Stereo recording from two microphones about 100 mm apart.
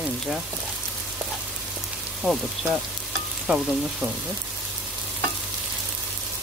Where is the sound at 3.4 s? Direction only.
10° right (ahead or behind).